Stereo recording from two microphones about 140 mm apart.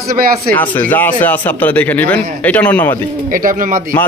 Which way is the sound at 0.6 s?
15° left (ahead or behind).